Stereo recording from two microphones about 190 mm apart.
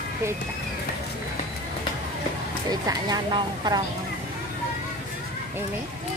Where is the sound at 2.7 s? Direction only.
20° right (ahead or behind).